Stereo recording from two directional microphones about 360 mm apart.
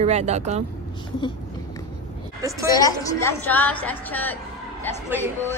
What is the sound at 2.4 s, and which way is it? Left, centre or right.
Speech, centre.